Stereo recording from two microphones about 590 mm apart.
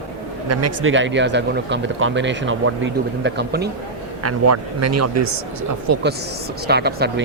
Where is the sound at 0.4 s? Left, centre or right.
Right.